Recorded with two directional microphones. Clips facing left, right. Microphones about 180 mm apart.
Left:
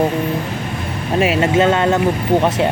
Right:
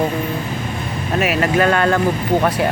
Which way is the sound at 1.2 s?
25° left (ahead or behind).